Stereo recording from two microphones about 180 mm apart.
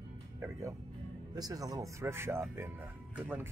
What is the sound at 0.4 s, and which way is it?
Speech, 15° right (ahead or behind).